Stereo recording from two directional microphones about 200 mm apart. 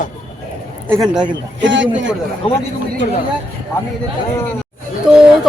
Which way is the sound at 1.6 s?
65° right (ahead or behind).